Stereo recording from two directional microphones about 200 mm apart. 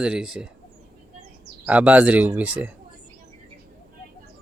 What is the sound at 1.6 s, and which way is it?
Speech, 5° right (ahead or behind).